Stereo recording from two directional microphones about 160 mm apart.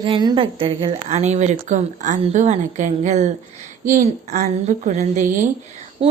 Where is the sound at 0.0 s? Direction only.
30° right (ahead or behind); by 5.5 s 55° right (ahead or behind).